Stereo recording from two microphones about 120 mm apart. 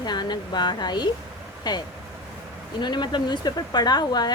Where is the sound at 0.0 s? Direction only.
35° left (ahead or behind).